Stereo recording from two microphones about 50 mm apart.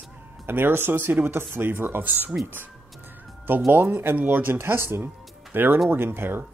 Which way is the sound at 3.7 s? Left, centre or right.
Right.